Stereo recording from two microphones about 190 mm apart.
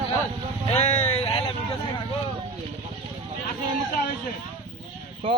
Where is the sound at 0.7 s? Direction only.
35° left (ahead or behind).